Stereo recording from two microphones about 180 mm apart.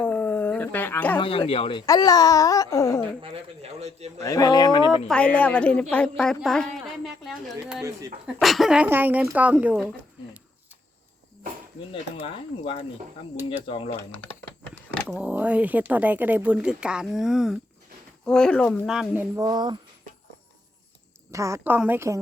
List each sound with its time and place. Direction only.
0.0 s dog: 10° left (ahead or behind)
1.2 s a child's voice: 30° left (ahead or behind)
1.9 s a child's voice: 20° left (ahead or behind)
3.2 s speech: 30° right (ahead or behind)
4.2 s a child's voice: 20° left (ahead or behind)
4.9 s a woman's voice: 5° left (ahead or behind)
13.3 s speech: 10° right (ahead or behind)
13.7 s a child's voice: 30° left (ahead or behind)
15.0 s a woman's voice: 10° right (ahead or behind)
19.5 s speech: 25° right (ahead or behind)
21.2 s speech: 15° right (ahead or behind)